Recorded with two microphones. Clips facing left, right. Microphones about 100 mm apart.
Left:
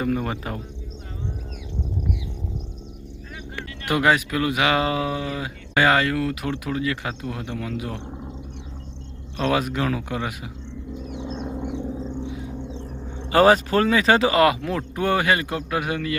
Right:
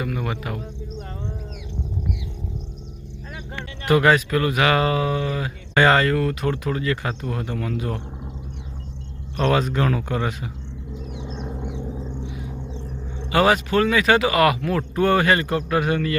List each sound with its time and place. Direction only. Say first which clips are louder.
0.0 s speech: left 2 dB; 30° left (ahead or behind)
3.8 s speech: right 3 dB; 15° left (ahead or behind)
9.4 s speech: right 2 dB; 10° left (ahead or behind)
11.3 s vehicle: left 3 dB; centre (ahead or behind)
12.3 s a sound: left 2 dB; 25° left (ahead or behind)
13.3 s speech: left 2 dB; 35° left (ahead or behind); by 16.1 s 10° left (ahead or behind)